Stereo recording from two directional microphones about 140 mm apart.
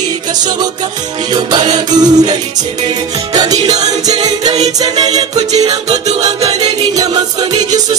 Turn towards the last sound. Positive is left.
turn(degrees=-30)  # may be behind; listen again after turning